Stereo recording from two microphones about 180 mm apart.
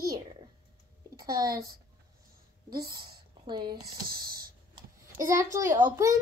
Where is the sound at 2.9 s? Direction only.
25° right (ahead or behind).